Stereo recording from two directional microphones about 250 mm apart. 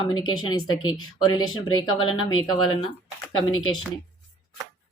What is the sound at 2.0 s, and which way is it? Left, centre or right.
A woman's voice, left.